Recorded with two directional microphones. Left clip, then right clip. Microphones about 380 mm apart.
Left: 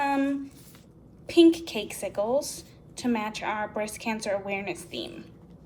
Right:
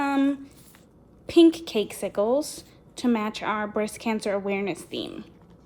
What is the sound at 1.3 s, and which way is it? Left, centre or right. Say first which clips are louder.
A woman's voice: right 2 dB; centre.